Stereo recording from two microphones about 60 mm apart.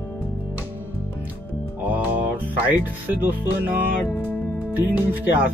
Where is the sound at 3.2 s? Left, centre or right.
Right.